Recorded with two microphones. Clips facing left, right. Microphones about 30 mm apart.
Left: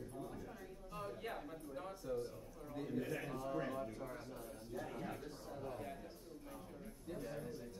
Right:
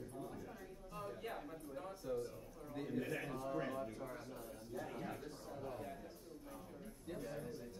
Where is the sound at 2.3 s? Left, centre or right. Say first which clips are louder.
Even; centre.